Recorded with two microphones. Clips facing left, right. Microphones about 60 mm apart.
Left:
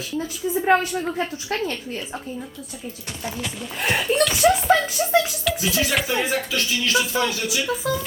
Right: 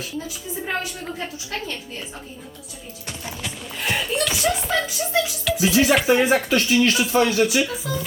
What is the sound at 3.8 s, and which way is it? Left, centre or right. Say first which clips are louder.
Speech: left 3 dB; centre.